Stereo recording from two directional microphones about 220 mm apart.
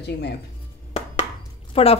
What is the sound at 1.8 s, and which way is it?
Speech, 25° left (ahead or behind).